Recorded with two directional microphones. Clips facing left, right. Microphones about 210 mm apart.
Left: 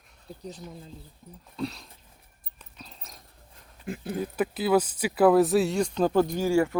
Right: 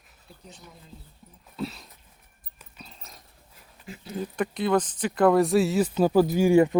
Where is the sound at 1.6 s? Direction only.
5° right (ahead or behind).